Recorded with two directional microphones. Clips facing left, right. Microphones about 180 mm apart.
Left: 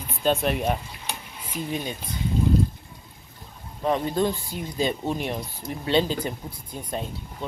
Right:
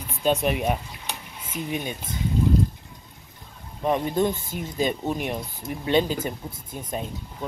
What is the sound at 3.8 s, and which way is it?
Speech, 15° right (ahead or behind).